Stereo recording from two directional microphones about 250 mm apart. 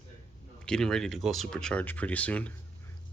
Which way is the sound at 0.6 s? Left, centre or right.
Centre.